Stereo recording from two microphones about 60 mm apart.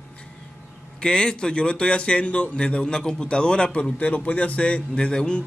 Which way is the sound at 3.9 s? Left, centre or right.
Left.